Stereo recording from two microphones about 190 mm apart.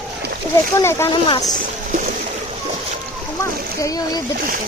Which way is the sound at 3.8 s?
20° left (ahead or behind).